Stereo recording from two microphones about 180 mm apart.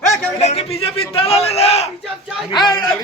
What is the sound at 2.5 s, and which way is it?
Speech, 25° left (ahead or behind).